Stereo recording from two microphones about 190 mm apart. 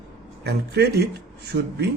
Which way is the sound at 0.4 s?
60° right (ahead or behind).